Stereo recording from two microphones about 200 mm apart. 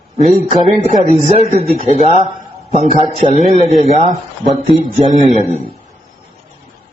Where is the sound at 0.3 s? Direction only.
35° right (ahead or behind).